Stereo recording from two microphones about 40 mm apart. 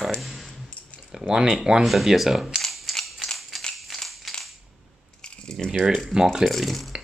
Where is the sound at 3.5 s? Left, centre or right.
Centre.